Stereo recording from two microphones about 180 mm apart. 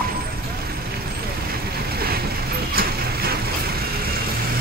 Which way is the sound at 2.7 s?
60° right (ahead or behind).